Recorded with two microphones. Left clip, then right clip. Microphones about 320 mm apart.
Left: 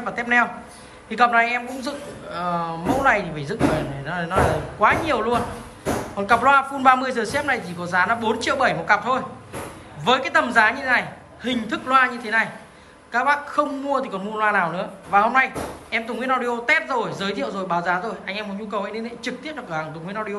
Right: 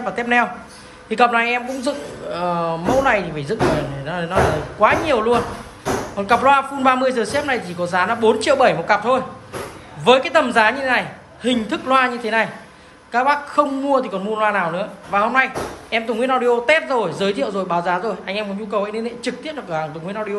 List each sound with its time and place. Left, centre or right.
0.0 s a man's voice: centre